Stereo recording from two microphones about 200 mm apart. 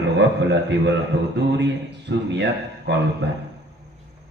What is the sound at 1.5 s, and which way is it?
A man's voice, 60° right (ahead or behind).